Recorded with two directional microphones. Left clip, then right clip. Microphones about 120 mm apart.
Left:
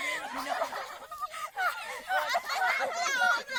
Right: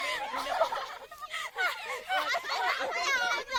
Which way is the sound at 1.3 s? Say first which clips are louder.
Right 1 dB; 20° right (ahead or behind).